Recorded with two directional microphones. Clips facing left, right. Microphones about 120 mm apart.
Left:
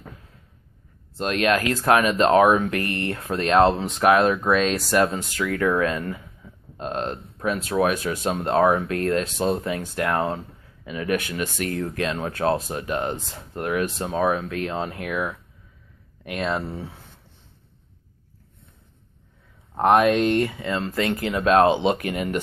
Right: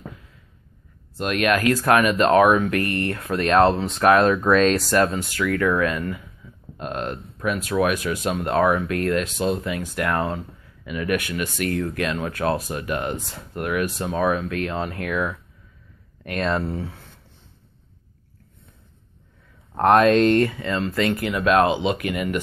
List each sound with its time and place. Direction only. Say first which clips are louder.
1.1 s speech: even; 30° left (ahead or behind)
19.8 s speech: right 2 dB; 15° left (ahead or behind); by 22.4 s 35° left (ahead or behind)